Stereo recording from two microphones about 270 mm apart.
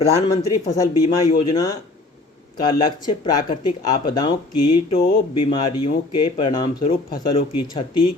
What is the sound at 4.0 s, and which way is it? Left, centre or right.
Speech, centre.